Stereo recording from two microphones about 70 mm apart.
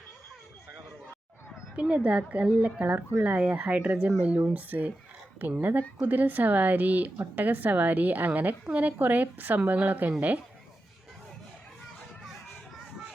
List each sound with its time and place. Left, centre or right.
1.7 s a woman's voice: centre